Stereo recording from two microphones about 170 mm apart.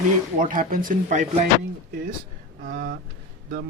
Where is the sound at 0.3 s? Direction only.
55° right (ahead or behind).